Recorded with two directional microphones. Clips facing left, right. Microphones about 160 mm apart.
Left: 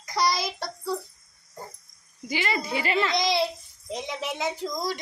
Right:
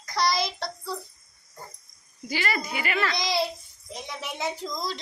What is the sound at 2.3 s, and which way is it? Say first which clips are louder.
A woman's voice: left 2 dB; 20° left (ahead or behind).